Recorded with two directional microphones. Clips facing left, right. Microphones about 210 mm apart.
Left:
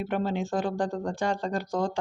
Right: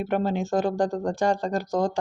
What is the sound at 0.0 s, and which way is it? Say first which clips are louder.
Speech: right 3 dB; 45° right (ahead or behind).